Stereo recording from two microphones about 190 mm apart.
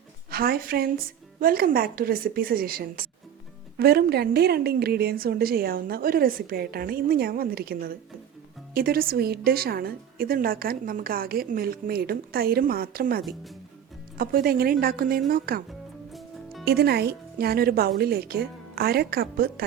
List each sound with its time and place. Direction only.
0.3 s a woman's voice: 50° right (ahead or behind)
16.1 s music: centre (ahead or behind)
16.6 s speech: 55° right (ahead or behind)